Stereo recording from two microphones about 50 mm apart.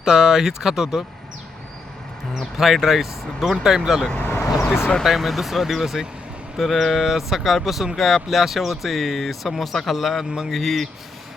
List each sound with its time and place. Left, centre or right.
0.0 s speech: centre
2.3 s speech: centre
4.2 s vehicle: left
5.0 s speech: centre